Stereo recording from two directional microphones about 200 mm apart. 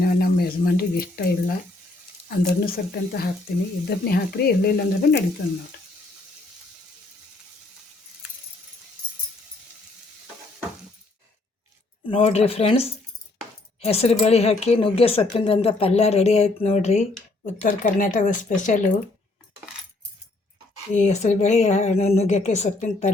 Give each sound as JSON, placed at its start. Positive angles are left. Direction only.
{"t": 0.0, "sound": "speech", "side_deg": 50}
{"t": 12.0, "sound": "speech", "side_deg": 30}
{"t": 20.9, "sound": "speech", "side_deg": 35}